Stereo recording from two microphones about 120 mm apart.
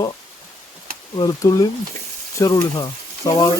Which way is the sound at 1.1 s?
30° left (ahead or behind).